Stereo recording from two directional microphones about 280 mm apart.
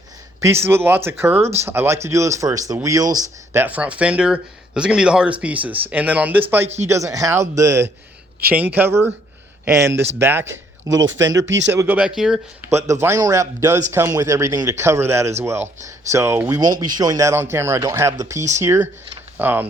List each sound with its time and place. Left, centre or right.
0.4 s speech: centre
10.9 s speech: right
11.8 s speech: centre